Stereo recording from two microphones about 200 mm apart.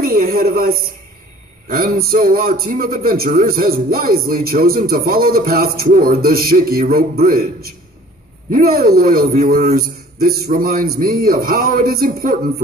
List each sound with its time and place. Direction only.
0.0 s a man's voice: 45° right (ahead or behind)